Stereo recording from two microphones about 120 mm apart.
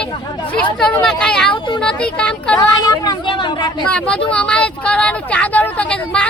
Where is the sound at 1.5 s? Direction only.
40° left (ahead or behind).